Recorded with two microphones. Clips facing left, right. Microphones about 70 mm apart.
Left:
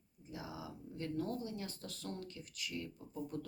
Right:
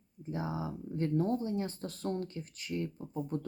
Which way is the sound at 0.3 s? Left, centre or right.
Right.